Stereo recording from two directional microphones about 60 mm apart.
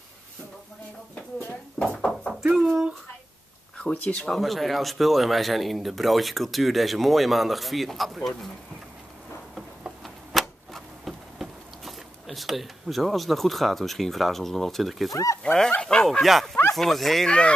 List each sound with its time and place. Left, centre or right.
1.8 s a sound: centre
3.7 s speech: left
4.3 s speech: centre
10.0 s a sound: centre
15.4 s speech: centre
17.3 s speech: centre